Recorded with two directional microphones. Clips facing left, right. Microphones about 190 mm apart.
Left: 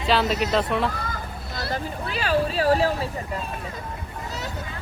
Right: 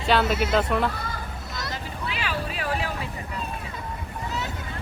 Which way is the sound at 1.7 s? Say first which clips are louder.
Left 6 dB; 40° left (ahead or behind).